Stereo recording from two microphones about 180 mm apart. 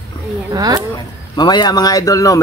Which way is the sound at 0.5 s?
20° right (ahead or behind).